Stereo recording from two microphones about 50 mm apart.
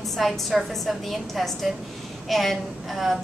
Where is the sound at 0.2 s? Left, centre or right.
Centre.